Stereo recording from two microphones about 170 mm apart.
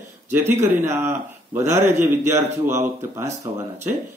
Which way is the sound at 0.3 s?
15° right (ahead or behind).